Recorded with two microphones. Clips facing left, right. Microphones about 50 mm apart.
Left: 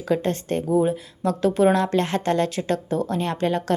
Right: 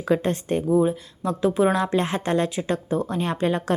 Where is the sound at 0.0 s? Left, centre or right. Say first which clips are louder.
Right 1 dB; right.